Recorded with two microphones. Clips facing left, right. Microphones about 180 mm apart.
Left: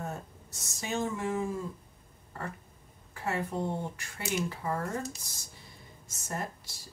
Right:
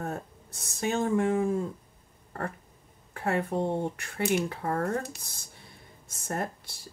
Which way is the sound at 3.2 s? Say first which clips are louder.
Right 5 dB; 60° right (ahead or behind).